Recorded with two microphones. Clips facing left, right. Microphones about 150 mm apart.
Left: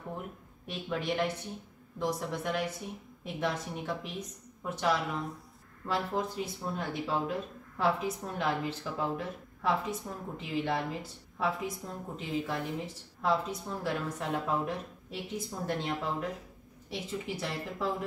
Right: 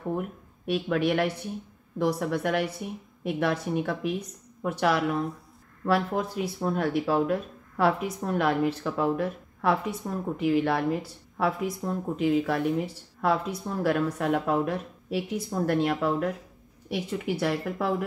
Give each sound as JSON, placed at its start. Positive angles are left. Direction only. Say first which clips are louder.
{"t": 0.7, "sound": "speech", "louder": "right 9 dB", "side_deg": -70}